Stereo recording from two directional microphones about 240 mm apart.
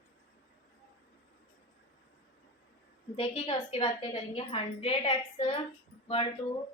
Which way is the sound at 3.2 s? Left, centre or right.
Left.